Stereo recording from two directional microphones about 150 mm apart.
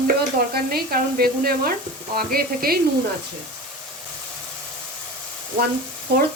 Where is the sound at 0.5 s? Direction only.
90° right.